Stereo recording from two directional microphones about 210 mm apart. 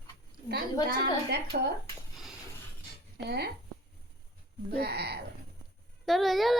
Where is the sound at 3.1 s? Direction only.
50° right (ahead or behind).